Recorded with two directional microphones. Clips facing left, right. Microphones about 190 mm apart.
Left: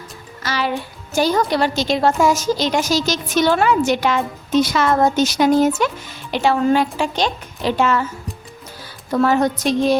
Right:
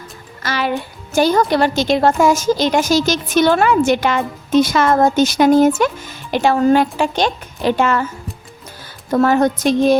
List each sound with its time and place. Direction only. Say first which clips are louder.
0.4 s music: right 2 dB; 55° right (ahead or behind)
1.1 s a woman's voice: right 3 dB; 55° right (ahead or behind)
9.0 s a woman's voice: right 3 dB; 50° right (ahead or behind)